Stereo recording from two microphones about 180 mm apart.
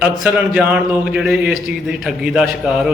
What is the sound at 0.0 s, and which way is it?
A man's voice, 5° right (ahead or behind).